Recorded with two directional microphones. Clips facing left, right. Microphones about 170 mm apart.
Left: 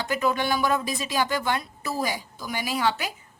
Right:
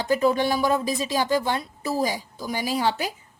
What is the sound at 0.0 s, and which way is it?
A woman's voice, 30° right (ahead or behind).